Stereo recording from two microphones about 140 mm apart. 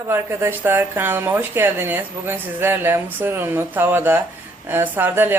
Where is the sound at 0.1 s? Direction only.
15° right (ahead or behind).